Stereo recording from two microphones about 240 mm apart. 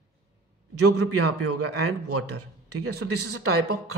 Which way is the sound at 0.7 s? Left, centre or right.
Right.